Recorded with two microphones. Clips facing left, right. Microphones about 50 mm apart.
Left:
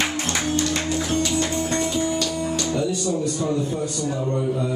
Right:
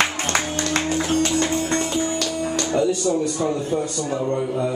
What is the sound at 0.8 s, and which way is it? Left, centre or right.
Music, right.